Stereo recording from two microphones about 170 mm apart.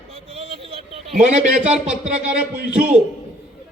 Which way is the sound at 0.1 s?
35° right (ahead or behind).